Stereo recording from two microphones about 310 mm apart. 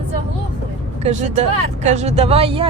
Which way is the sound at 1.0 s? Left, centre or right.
Right.